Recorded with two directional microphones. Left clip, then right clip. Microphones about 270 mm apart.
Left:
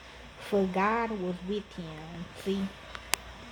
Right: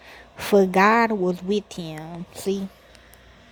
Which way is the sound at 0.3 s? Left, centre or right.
Right.